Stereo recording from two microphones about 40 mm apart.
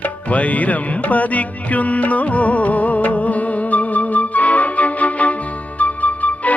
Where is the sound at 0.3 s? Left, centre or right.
Left.